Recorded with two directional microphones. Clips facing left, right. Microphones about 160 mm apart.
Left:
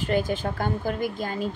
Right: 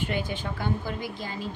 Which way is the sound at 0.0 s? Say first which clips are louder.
Left 6 dB; 40° left (ahead or behind).